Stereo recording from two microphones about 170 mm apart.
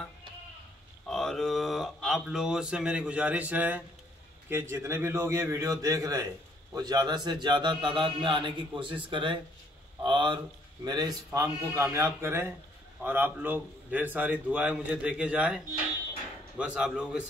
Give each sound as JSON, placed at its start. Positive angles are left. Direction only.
{"t": 1.0, "sound": "a man's voice", "side_deg": 0}